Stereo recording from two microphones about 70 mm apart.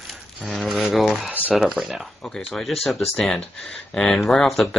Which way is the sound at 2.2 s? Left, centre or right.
Centre.